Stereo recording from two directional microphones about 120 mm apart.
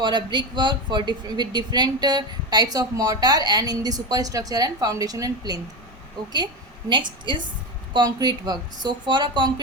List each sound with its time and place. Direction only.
0.0 s a woman's voice: 40° right (ahead or behind)